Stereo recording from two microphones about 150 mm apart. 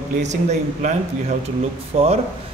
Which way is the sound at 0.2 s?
50° right (ahead or behind).